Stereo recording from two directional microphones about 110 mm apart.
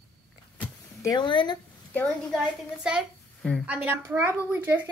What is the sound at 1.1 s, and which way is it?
Speech, 45° left (ahead or behind).